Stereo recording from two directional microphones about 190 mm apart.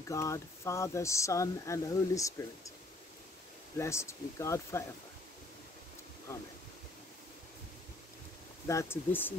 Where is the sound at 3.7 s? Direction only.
15° left (ahead or behind).